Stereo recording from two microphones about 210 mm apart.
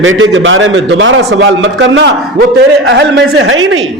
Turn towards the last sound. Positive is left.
turn(degrees=-70)  # may be behind; listen again after turning